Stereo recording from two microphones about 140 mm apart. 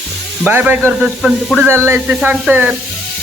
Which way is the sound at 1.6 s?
15° right (ahead or behind).